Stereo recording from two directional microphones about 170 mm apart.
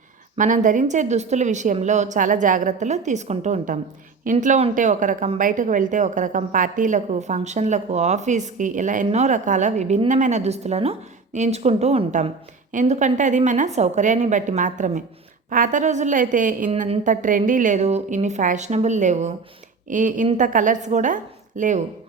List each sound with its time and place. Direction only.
0.3 s a woman's voice: 50° right (ahead or behind)